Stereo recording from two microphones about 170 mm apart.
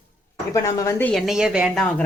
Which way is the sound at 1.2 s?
5° right (ahead or behind).